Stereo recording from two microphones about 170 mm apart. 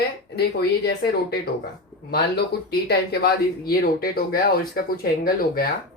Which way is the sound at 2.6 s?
70° left (ahead or behind).